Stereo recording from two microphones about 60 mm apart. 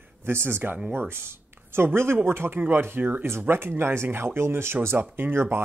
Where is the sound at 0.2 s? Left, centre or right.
Right.